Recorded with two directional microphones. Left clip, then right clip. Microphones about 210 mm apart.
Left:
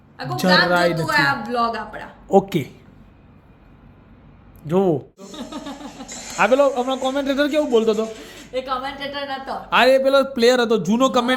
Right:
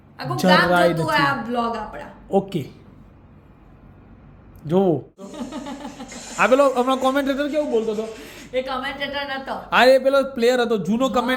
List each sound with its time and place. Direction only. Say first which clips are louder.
0.3 s a woman's voice: even; centre (ahead or behind)
2.3 s a woman's voice: left 5 dB; 15° left (ahead or behind)
4.6 s a woman's voice: even; centre (ahead or behind)
6.5 s a woman's voice: right 2 dB; 5° right (ahead or behind)
7.3 s a woman's voice: left 4 dB; 20° left (ahead or behind)
7.7 s a man's voice: left 4 dB; 30° left (ahead or behind)
8.5 s a woman's voice: even; 15° right (ahead or behind); by 11.3 s 15° left (ahead or behind)